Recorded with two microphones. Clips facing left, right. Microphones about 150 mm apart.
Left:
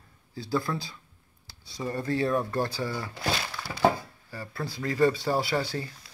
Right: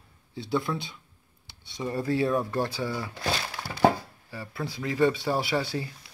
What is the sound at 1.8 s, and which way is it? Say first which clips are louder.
Speech: right 2 dB; 5° right (ahead or behind).